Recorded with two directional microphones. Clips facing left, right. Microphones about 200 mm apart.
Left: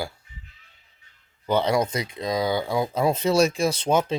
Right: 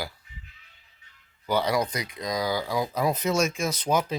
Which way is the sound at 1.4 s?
25° left (ahead or behind).